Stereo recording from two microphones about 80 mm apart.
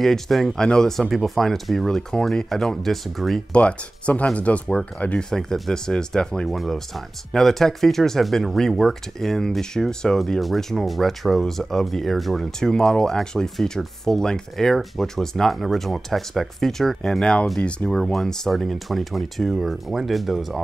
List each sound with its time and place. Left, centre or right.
0.0 s speech: centre
3.5 s speech: centre